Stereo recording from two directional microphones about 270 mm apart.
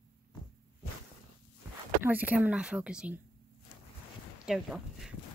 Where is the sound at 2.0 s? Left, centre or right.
Centre.